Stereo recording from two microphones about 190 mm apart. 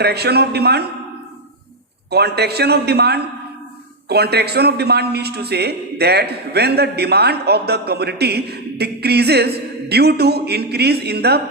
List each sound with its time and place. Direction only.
0.0 s a man's voice: 60° right (ahead or behind)
2.0 s a man's voice: 60° right (ahead or behind)